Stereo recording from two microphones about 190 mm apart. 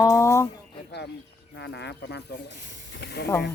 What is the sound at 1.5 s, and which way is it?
Speech, 65° left (ahead or behind).